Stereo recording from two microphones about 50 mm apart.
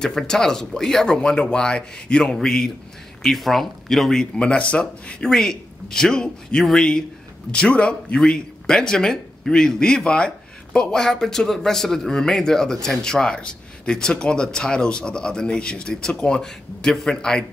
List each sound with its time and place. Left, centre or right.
0.0 s a man's voice: centre
5.3 s a man's voice: centre
8.2 s a man's voice: centre